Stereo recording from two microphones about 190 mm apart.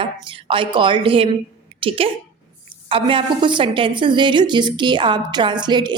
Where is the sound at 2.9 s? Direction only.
30° right (ahead or behind).